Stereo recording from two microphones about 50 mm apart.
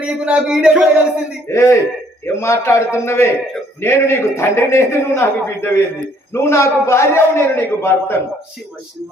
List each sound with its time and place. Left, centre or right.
0.0 s speech: right
1.5 s a man's voice: left
2.2 s a man's voice: left